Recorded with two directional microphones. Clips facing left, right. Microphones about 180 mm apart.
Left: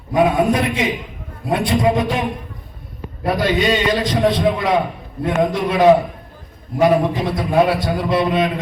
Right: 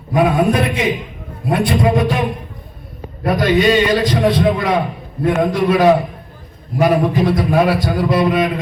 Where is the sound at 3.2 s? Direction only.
25° left (ahead or behind).